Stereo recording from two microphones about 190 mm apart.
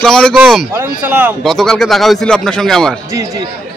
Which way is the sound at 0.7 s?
10° right (ahead or behind).